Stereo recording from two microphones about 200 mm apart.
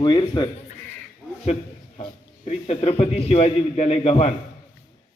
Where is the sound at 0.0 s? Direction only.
20° left (ahead or behind).